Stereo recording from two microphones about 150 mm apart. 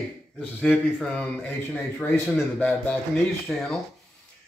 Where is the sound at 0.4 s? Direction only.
10° left (ahead or behind).